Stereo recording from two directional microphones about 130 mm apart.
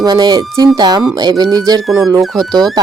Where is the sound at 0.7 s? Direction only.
30° right (ahead or behind).